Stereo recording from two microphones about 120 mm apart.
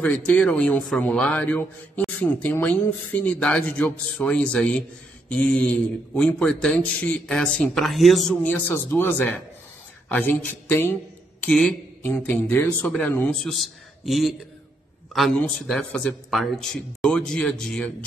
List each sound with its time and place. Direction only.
0.0 s speech: 10° left (ahead or behind)
11.4 s speech: 10° left (ahead or behind)
13.4 s a man's voice: centre (ahead or behind)